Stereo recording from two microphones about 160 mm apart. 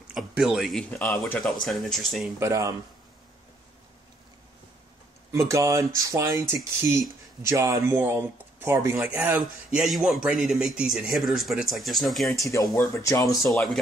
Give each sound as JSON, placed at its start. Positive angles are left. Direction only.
{"t": 0.1, "sound": "speech", "side_deg": -5}
{"t": 2.3, "sound": "speech", "side_deg": -20}
{"t": 5.3, "sound": "speech", "side_deg": -20}
{"t": 12.7, "sound": "speech", "side_deg": 20}
{"t": 13.4, "sound": "speech", "side_deg": 0}